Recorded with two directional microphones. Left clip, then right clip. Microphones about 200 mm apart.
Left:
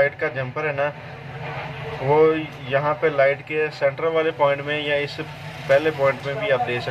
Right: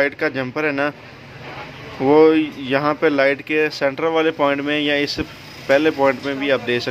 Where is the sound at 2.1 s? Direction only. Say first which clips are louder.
Right 4 dB; 70° right (ahead or behind).